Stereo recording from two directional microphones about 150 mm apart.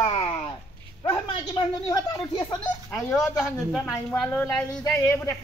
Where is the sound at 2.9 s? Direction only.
20° left (ahead or behind).